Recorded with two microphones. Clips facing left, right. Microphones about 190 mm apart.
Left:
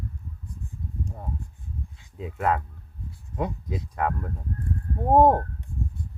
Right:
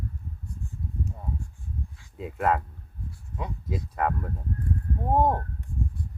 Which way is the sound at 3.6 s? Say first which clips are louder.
Even; centre (ahead or behind).